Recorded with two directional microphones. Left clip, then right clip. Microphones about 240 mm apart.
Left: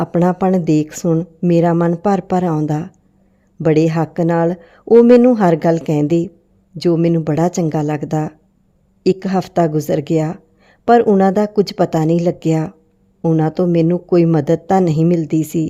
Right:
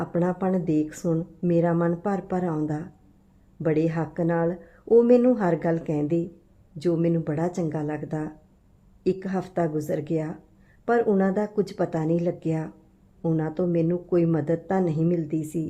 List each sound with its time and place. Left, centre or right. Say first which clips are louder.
0.0 s speech: left 10 dB; left